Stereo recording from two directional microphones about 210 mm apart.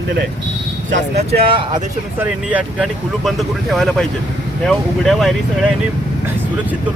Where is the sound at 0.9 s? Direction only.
30° right (ahead or behind).